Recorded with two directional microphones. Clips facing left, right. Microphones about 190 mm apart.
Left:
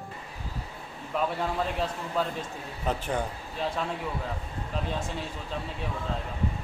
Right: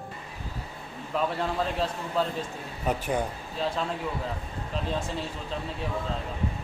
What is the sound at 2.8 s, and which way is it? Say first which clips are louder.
Speech: right 2 dB; 15° right (ahead or behind).